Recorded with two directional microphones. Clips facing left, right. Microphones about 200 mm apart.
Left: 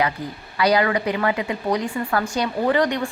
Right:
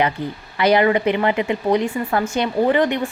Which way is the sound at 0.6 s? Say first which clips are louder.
Right 4 dB; 25° right (ahead or behind).